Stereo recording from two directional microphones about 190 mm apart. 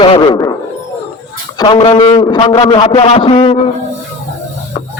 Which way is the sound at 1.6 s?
25° left (ahead or behind).